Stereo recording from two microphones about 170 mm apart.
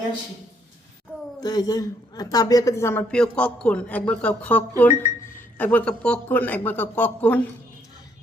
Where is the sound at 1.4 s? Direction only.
20° left (ahead or behind).